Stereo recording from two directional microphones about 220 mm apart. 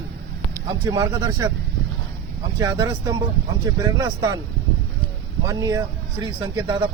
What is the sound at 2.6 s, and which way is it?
Speech, 15° right (ahead or behind).